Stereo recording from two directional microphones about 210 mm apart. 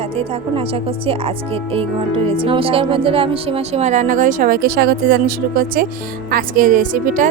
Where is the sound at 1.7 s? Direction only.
25° right (ahead or behind).